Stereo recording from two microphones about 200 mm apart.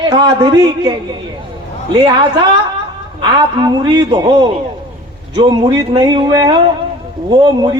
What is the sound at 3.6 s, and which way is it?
Speech, 20° right (ahead or behind).